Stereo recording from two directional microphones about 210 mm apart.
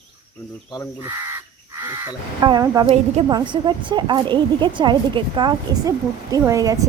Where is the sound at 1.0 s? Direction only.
10° right (ahead or behind).